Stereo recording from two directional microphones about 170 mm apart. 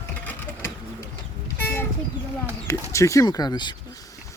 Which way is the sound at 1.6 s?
10° left (ahead or behind).